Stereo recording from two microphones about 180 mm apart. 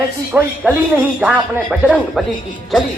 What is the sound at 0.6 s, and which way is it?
Speech, 5° right (ahead or behind).